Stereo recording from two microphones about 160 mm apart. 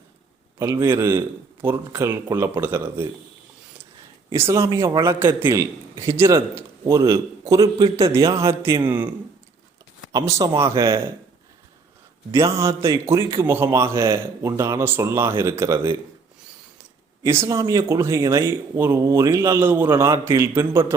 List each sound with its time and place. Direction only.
0.6 s speech: 20° right (ahead or behind)
4.3 s speech: 15° right (ahead or behind)
10.1 s speech: 20° right (ahead or behind)
12.3 s speech: 20° right (ahead or behind)
17.2 s speech: 15° right (ahead or behind)